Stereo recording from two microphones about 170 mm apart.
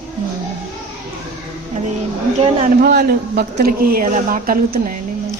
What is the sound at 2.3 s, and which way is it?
Speech, 40° right (ahead or behind).